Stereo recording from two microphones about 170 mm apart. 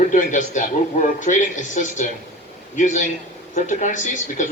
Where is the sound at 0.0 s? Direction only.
50° left (ahead or behind).